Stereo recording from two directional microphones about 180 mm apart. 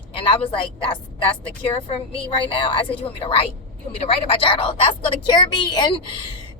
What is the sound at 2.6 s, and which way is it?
Speech, 30° left (ahead or behind).